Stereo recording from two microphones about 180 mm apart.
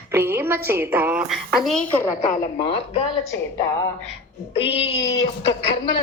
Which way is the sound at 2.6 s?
30° left (ahead or behind).